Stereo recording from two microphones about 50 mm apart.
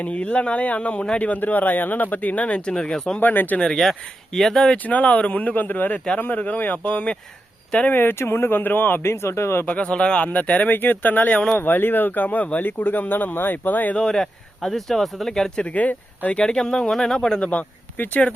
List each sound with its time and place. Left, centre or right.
0.0 s speech: left
1.3 s speech: left; by 3.2 s centre
3.2 s speech: left
3.8 s speech: centre
4.9 s speech: left
7.9 s speech: left
9.0 s speech: left
9.6 s speech: left
10.7 s speech: left
13.9 s speech: centre
15.6 s speech: left
16.4 s speech: centre; by 18.3 s left